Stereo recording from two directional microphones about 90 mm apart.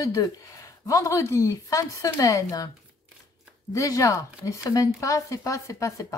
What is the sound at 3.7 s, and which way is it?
Speech, 40° left (ahead or behind).